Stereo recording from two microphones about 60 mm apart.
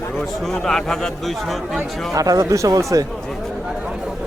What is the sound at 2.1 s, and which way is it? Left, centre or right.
Speech, right.